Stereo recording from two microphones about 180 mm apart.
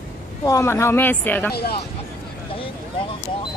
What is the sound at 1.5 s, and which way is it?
Speech, 60° left (ahead or behind).